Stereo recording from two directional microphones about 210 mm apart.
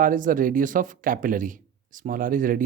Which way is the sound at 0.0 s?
40° right (ahead or behind).